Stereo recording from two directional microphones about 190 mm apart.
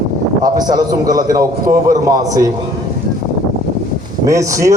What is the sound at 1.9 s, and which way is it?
Mantra, 15° right (ahead or behind).